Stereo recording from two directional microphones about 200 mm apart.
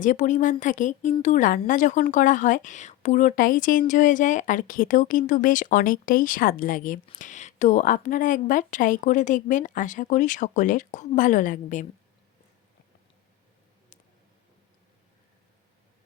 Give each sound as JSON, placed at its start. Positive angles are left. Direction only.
{"t": 0.0, "sound": "a woman's voice", "side_deg": 40}